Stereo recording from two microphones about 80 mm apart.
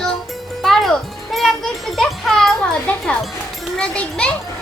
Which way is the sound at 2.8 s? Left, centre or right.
Centre.